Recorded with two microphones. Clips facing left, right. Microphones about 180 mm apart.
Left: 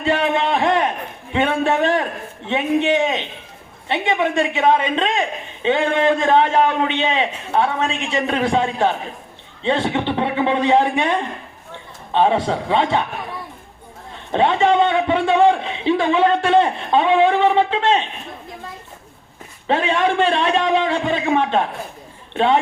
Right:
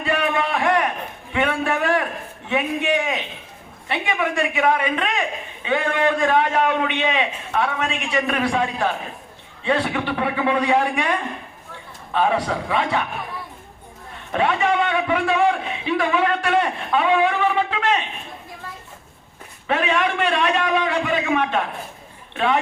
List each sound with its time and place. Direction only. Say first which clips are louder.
0.0 s a sound: left 3 dB; 25° left (ahead or behind)
2.5 s a man's voice: left 4 dB; 25° left (ahead or behind)
14.3 s a man's voice: left 4 dB; 25° left (ahead or behind)
19.6 s a man's voice: left 3 dB; 30° left (ahead or behind)